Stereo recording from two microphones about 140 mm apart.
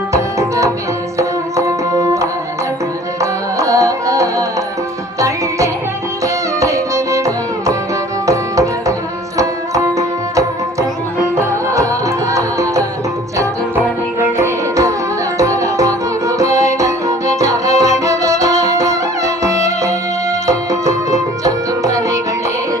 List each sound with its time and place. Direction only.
0.1 s music: 20° right (ahead or behind)
14.2 s music: 20° right (ahead or behind)